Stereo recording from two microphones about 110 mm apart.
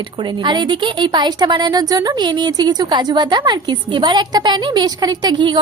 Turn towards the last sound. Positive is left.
turn(degrees=-45)  # may be behind; listen again after turning